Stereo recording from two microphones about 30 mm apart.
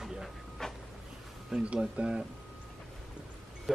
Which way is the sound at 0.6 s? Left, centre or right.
Centre.